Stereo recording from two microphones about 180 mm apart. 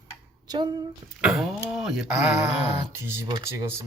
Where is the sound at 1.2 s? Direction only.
Centre (ahead or behind).